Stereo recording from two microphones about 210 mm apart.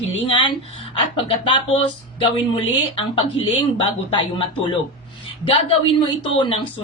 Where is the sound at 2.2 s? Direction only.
25° left (ahead or behind).